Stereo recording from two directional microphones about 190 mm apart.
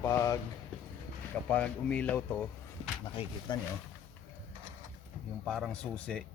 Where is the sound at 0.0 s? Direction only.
15° left (ahead or behind).